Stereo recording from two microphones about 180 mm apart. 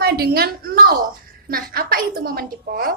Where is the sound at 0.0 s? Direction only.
60° right (ahead or behind).